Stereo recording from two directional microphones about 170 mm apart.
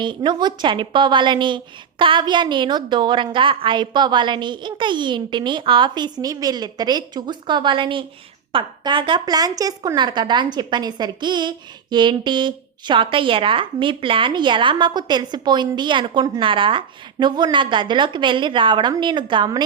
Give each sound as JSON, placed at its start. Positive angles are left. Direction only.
{"t": 0.0, "sound": "a woman's voice", "side_deg": -25}